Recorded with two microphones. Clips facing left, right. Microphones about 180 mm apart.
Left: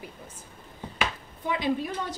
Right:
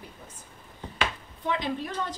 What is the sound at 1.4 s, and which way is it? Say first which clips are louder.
Speech: left 2 dB; 10° left (ahead or behind).